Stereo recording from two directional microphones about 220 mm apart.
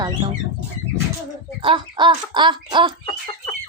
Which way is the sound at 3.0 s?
20° left (ahead or behind).